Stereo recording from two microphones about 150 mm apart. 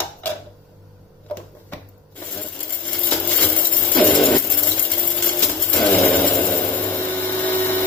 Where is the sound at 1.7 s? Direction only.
10° left (ahead or behind).